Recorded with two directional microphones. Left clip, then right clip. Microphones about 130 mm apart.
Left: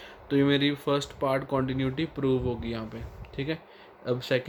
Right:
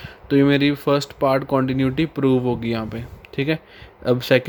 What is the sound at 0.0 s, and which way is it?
Speech, 60° right (ahead or behind).